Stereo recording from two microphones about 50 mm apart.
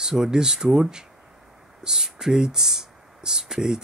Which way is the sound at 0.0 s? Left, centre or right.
Centre.